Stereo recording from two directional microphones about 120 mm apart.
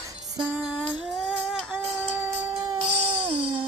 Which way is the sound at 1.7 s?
15° right (ahead or behind).